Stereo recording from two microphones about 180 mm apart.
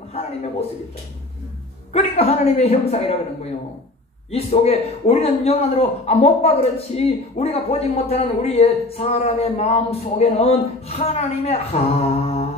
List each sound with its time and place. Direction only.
0.1 s a man's voice: 35° left (ahead or behind)
1.9 s a man's voice: 35° left (ahead or behind)
4.3 s a man's voice: 35° left (ahead or behind)